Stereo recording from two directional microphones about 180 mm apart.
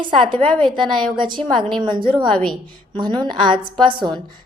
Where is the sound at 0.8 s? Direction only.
25° right (ahead or behind).